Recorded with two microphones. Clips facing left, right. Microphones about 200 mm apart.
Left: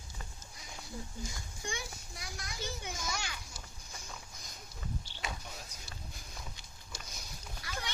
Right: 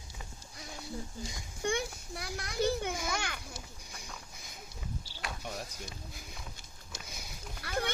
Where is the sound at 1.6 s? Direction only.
60° right (ahead or behind).